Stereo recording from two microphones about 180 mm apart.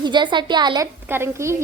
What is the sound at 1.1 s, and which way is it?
Speech, 15° right (ahead or behind).